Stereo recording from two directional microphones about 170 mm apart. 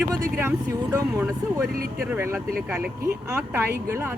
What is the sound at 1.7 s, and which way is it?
Speech, 60° right (ahead or behind).